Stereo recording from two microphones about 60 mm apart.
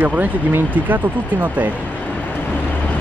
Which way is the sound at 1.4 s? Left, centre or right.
Right.